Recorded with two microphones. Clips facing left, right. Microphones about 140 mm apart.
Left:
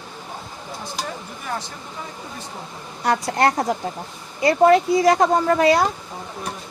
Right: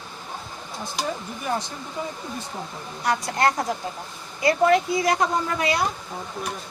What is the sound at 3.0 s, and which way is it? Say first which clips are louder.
Speech: left 3 dB; 35° left (ahead or behind).